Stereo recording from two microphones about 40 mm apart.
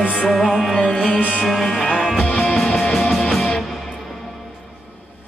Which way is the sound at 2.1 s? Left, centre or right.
Left.